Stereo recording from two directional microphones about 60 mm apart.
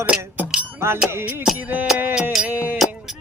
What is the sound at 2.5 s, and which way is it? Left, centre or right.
Music, right.